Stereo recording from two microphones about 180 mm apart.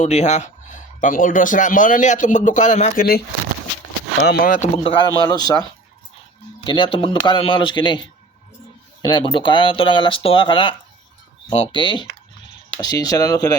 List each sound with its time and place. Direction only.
0.0 s speech: 40° left (ahead or behind); by 3.2 s 55° left (ahead or behind)
4.2 s speech: 70° left (ahead or behind)
4.4 s speech: 45° left (ahead or behind)
5.3 s speech: 20° left (ahead or behind)
6.7 s speech: 25° left (ahead or behind)